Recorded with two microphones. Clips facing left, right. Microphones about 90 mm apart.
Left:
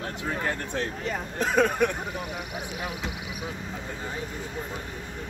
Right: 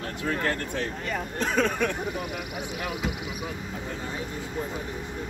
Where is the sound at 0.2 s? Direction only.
15° left (ahead or behind).